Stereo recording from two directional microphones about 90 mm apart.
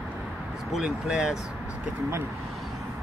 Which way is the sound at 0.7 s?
5° right (ahead or behind).